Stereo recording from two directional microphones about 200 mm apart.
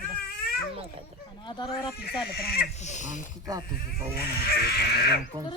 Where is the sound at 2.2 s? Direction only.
50° left (ahead or behind).